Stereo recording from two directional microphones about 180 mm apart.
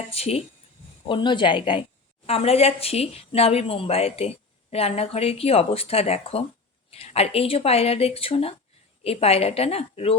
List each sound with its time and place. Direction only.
0.1 s speech: 35° left (ahead or behind)